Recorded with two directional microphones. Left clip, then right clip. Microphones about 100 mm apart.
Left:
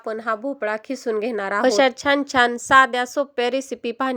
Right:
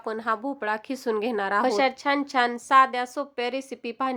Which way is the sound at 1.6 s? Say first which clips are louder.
Left 9 dB; 50° left (ahead or behind).